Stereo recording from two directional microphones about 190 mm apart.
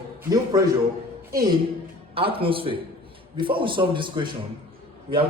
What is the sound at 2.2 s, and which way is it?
A man's voice, 30° right (ahead or behind).